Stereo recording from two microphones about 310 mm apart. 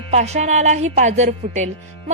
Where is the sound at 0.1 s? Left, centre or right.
Right.